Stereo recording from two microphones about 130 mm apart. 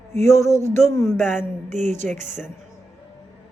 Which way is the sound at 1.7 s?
70° right (ahead or behind).